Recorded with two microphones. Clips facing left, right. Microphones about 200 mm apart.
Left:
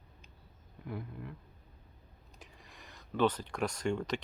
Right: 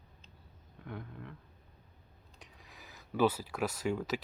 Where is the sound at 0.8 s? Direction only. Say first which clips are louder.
Left 3 dB; 5° left (ahead or behind).